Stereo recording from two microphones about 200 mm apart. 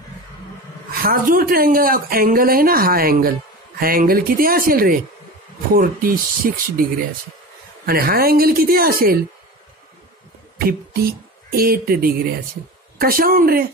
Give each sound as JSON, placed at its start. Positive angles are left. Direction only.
{"t": 1.0, "sound": "speech", "side_deg": -45}
{"t": 10.6, "sound": "speech", "side_deg": -50}